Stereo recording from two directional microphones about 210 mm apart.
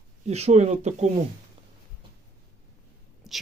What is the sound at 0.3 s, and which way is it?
Speech, 30° right (ahead or behind).